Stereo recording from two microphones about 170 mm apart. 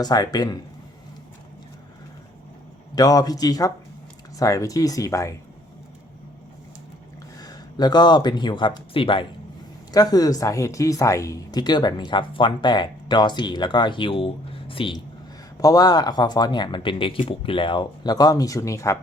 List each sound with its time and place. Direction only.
0.0 s speech: 25° left (ahead or behind)
2.9 s speech: 20° left (ahead or behind)
7.3 s a man's voice: 25° left (ahead or behind)